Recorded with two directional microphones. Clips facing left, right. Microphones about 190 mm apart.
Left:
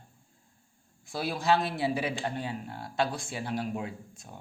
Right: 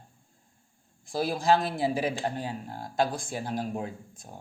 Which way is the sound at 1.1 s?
40° right (ahead or behind).